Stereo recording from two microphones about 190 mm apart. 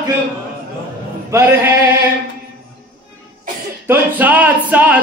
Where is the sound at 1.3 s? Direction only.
10° right (ahead or behind).